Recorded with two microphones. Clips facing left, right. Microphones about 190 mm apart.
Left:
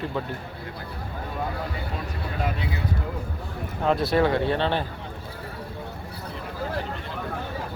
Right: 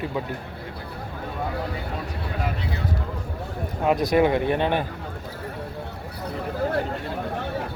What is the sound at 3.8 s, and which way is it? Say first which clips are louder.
Speech: right 2 dB; 15° right (ahead or behind).